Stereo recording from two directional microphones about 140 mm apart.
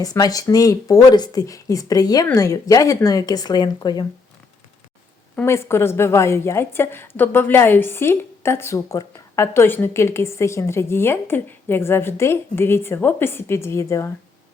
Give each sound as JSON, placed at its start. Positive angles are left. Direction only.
{"t": 0.0, "sound": "speech", "side_deg": 25}
{"t": 5.5, "sound": "a woman's voice", "side_deg": 20}